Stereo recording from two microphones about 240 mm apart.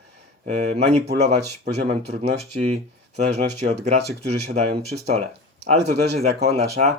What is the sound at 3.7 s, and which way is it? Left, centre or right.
Speech, right.